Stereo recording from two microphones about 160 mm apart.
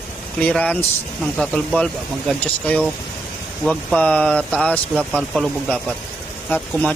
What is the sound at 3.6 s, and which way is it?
Speech, 5° left (ahead or behind).